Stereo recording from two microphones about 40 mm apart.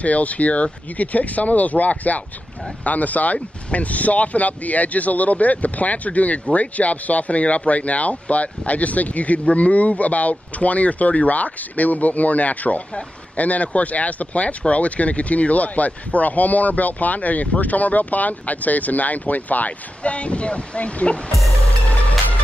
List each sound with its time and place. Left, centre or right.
0.0 s speech: left
21.3 s speech: centre